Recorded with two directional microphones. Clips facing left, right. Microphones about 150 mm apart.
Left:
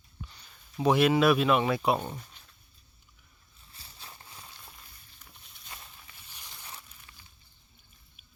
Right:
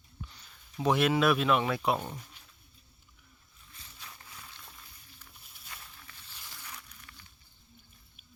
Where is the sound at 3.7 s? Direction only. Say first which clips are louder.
Left 1 dB; 35° left (ahead or behind).